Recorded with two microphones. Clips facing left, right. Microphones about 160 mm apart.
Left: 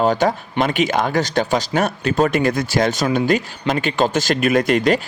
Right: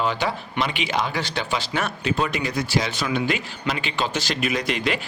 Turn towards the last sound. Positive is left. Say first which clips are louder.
# left 9 dB
turn(degrees=45)  # may be behind; listen again after turning